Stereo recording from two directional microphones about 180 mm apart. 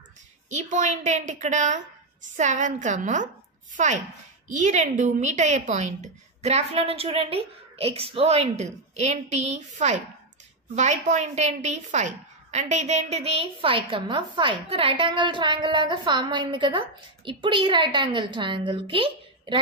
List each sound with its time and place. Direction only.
0.5 s a woman's voice: 40° right (ahead or behind)